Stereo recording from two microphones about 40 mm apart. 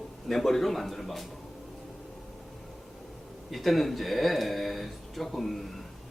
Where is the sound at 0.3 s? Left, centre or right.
Centre.